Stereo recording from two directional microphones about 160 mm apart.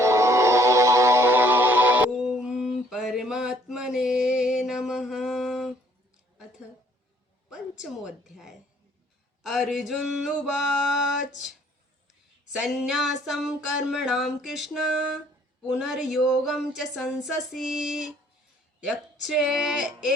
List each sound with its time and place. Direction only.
0.0 s music: 20° right (ahead or behind); by 5.7 s centre (ahead or behind)
7.5 s a woman's voice: 5° right (ahead or behind)
9.4 s music: centre (ahead or behind)
12.6 s music: 5° right (ahead or behind)
19.2 s music: centre (ahead or behind)